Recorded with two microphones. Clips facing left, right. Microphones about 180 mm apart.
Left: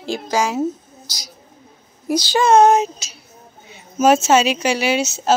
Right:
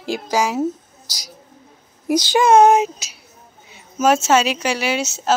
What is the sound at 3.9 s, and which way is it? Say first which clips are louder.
Speech: left 2 dB; 25° left (ahead or behind).